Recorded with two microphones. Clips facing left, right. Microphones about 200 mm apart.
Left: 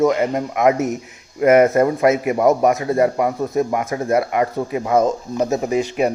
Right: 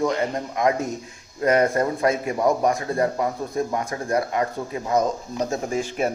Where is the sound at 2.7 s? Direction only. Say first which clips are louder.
Left 5 dB; 20° left (ahead or behind).